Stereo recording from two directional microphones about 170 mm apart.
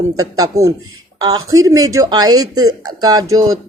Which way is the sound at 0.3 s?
20° right (ahead or behind).